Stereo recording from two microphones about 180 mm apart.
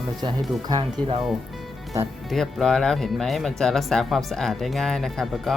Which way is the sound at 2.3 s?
Centre (ahead or behind).